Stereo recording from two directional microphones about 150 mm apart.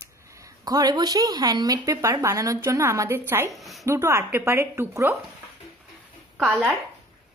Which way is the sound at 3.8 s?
15° right (ahead or behind).